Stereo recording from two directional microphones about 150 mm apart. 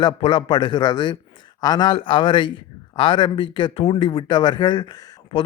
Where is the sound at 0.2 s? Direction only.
35° left (ahead or behind).